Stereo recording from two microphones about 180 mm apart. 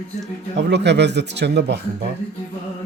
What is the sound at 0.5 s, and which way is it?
Speech, 75° right (ahead or behind).